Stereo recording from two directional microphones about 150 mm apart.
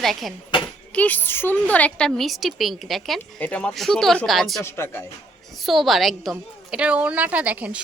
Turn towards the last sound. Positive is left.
turn(degrees=-10)  # may be behind; listen again after turning